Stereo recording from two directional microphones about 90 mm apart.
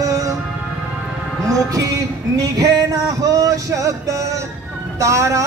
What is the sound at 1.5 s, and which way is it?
Speech, 40° right (ahead or behind).